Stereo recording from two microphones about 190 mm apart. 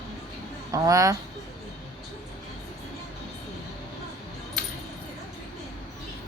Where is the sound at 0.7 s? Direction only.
15° right (ahead or behind).